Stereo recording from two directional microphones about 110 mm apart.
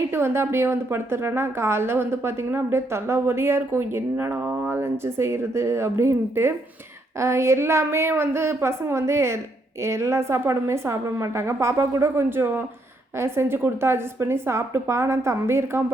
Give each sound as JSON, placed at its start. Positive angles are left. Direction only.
{"t": 0.1, "sound": "a woman's voice", "side_deg": -20}